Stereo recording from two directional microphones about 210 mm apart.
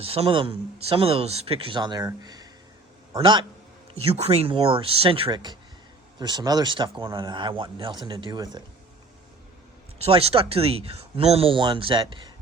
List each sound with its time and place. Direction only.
0.0 s speech: 25° right (ahead or behind)
10.0 s speech: 30° right (ahead or behind)